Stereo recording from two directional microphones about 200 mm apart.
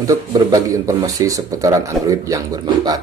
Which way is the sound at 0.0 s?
15° right (ahead or behind).